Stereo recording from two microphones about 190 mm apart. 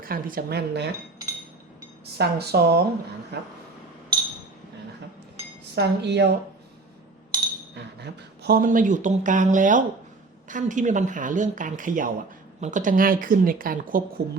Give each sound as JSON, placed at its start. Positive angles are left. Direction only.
{"t": 0.0, "sound": "speech", "side_deg": -50}
{"t": 2.1, "sound": "speech", "side_deg": -60}
{"t": 5.7, "sound": "speech", "side_deg": -60}
{"t": 8.0, "sound": "speech", "side_deg": -55}